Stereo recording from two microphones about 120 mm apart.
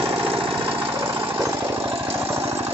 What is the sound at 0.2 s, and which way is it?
Jackhammer, 45° right (ahead or behind).